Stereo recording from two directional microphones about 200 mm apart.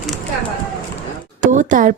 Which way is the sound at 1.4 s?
40° right (ahead or behind).